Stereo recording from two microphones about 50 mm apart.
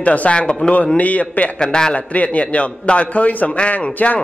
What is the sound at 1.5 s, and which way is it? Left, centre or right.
Speech, centre.